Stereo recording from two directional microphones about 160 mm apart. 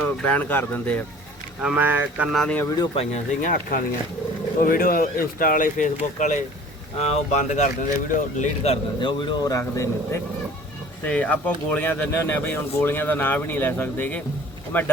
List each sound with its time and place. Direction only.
0.0 s speech: 10° left (ahead or behind)
1.6 s speech: 10° right (ahead or behind)
2.3 s speech: 5° left (ahead or behind)
2.6 s speech: 25° left (ahead or behind)
2.9 s speech: 40° left (ahead or behind)
4.6 s speech: 65° left (ahead or behind); by 14.9 s 10° left (ahead or behind)